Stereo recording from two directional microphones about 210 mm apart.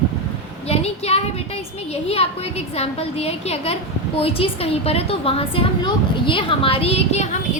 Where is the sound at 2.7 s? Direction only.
30° left (ahead or behind).